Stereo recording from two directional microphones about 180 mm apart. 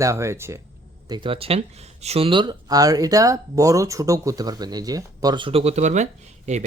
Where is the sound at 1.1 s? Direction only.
30° right (ahead or behind).